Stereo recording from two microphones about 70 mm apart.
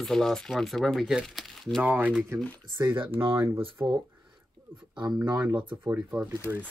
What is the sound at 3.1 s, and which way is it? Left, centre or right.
Speech, right.